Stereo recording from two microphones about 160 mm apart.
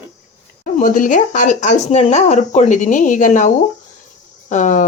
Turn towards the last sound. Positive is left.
turn(degrees=50)  # may be behind; listen again after turning